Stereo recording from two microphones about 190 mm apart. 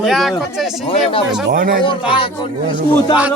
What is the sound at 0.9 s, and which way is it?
Speech, 30° left (ahead or behind).